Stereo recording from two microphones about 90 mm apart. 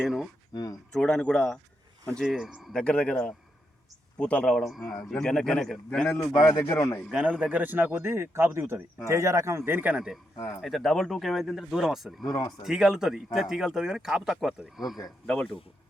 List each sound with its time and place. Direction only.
0.0 s speech: 5° right (ahead or behind)
0.5 s a man's voice: 40° left (ahead or behind)
0.9 s speech: 10° left (ahead or behind)
2.2 s speech: 5° right (ahead or behind)
2.7 s speech: 10° left (ahead or behind)
6.1 s a man's voice: 35° left (ahead or behind)
6.3 s speech: 45° left (ahead or behind)
7.1 s a man's voice: 10° right (ahead or behind)
10.6 s speech: centre (ahead or behind)
12.2 s speech: 50° left (ahead or behind)
12.6 s speech: 5° right (ahead or behind)